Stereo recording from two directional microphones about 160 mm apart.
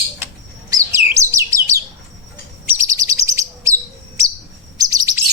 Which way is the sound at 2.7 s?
20° right (ahead or behind).